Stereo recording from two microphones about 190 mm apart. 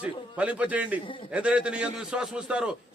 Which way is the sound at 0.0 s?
5° right (ahead or behind).